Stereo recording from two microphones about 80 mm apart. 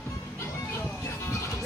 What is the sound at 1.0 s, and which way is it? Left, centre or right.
Music, left.